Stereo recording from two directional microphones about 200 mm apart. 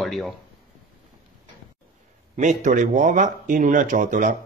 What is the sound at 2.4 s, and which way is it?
Speech, 40° right (ahead or behind).